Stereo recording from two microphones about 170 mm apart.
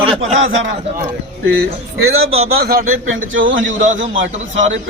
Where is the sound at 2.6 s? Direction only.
65° right (ahead or behind).